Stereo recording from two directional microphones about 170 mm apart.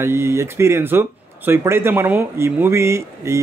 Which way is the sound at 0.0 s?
15° right (ahead or behind).